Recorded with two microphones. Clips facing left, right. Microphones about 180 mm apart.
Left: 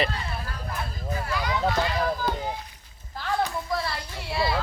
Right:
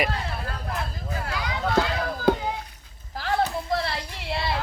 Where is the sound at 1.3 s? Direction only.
70° right (ahead or behind).